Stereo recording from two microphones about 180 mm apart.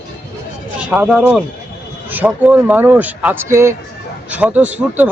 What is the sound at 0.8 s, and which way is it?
A man's voice, 5° right (ahead or behind).